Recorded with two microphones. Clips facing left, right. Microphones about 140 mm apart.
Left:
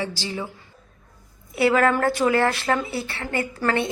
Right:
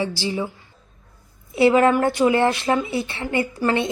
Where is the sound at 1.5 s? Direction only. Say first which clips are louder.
Right 4 dB; 20° right (ahead or behind).